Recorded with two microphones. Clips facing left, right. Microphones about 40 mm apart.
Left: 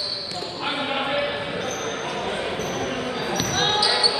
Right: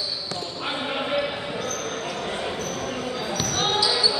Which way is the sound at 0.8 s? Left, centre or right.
Centre.